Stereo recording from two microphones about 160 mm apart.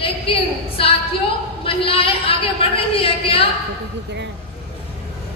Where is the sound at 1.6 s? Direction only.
35° left (ahead or behind).